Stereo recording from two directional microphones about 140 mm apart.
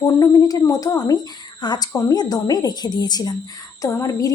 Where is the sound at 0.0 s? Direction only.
25° left (ahead or behind).